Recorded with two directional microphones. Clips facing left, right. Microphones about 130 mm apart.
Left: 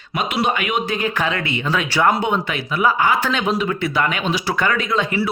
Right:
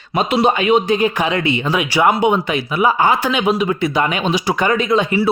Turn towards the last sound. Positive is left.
turn(degrees=-20)  # may be behind; listen again after turning